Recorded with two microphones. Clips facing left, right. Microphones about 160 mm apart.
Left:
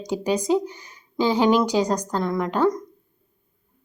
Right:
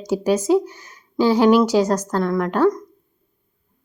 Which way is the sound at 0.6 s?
15° left (ahead or behind).